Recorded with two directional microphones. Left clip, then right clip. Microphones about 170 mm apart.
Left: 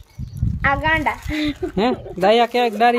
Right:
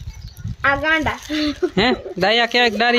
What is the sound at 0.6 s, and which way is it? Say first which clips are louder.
Speech: right 1 dB; 45° right (ahead or behind).